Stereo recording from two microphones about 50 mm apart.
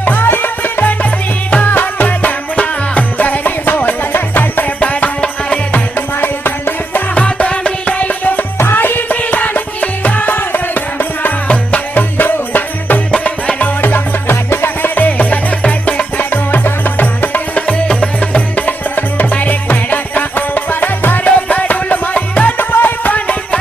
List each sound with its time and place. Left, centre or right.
0.0 s music: left
6.2 s music: left
7.2 s music: left
8.5 s music: left
13.1 s music: left
13.7 s music: left
15.0 s music: left